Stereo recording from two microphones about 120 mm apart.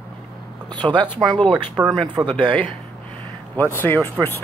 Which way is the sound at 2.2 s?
5° right (ahead or behind).